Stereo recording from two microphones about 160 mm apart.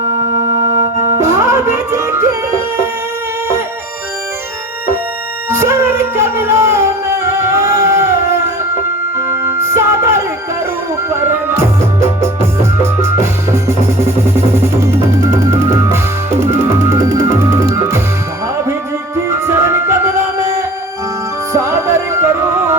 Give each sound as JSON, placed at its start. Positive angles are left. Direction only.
{"t": 1.2, "sound": "music", "side_deg": -15}
{"t": 5.5, "sound": "music", "side_deg": -15}
{"t": 9.1, "sound": "music", "side_deg": -15}
{"t": 19.3, "sound": "music", "side_deg": -15}